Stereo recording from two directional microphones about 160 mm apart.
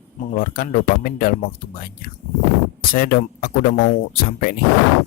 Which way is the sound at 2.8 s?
60° left (ahead or behind).